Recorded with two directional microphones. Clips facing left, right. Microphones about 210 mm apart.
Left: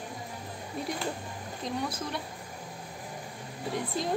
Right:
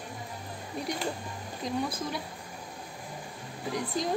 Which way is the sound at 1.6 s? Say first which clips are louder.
Right 2 dB; centre (ahead or behind).